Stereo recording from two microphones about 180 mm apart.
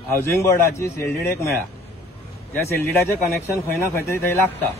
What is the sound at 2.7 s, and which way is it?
A man's voice, 15° left (ahead or behind).